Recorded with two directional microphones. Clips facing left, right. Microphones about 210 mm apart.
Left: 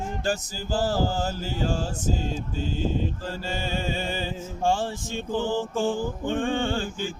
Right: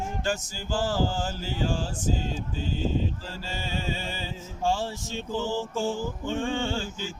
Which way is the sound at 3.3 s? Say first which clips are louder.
Left 5 dB; 50° left (ahead or behind).